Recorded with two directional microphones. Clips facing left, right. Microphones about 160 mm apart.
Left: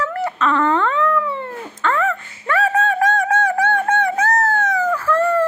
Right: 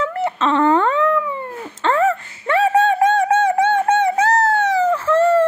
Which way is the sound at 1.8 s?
35° right (ahead or behind).